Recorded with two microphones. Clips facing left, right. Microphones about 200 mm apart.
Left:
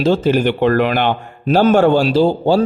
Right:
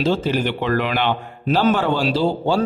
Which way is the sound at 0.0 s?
50° left (ahead or behind).